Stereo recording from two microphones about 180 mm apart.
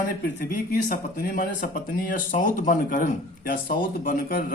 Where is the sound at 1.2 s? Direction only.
55° left (ahead or behind).